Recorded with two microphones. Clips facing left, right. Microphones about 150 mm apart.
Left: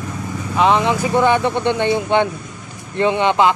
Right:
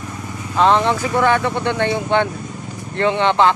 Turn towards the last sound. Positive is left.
turn(degrees=15)  # may be behind; listen again after turning